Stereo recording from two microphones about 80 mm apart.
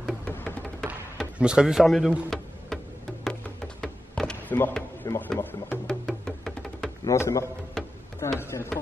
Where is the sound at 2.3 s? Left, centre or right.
Centre.